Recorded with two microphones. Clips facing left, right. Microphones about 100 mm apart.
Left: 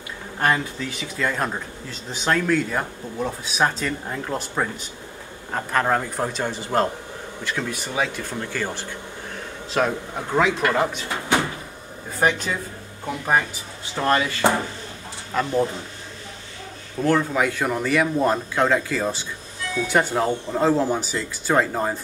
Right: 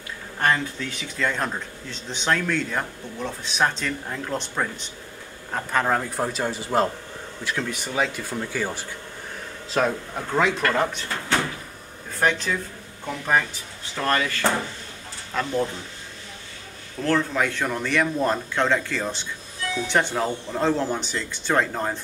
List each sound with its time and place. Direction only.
0.4 s a man's voice: 5° left (ahead or behind)
9.7 s speech: 5° left (ahead or behind)
17.0 s a man's voice: 10° left (ahead or behind)